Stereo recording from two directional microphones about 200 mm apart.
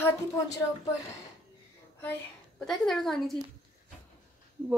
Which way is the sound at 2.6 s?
Centre (ahead or behind).